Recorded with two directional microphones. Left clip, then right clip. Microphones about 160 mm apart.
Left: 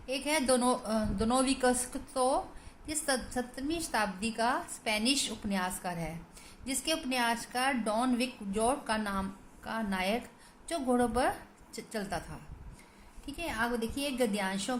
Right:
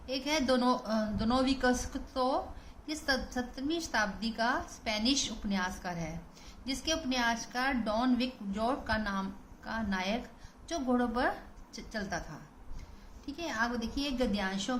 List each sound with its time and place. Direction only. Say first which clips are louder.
0.0 s a woman's voice: left 1 dB; 35° left (ahead or behind)